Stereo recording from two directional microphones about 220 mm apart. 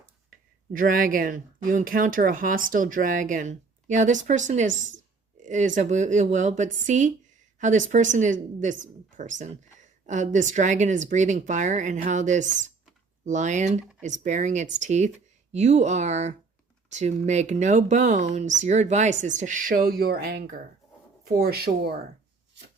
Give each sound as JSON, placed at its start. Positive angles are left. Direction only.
{"t": 0.3, "sound": "speech", "side_deg": -40}